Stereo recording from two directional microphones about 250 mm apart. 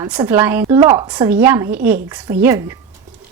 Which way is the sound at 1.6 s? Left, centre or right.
Right.